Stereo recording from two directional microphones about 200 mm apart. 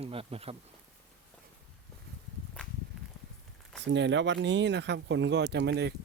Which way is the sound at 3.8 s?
65° right (ahead or behind).